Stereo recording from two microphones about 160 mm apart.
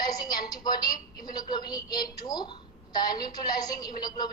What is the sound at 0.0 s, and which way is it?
Television, 25° left (ahead or behind).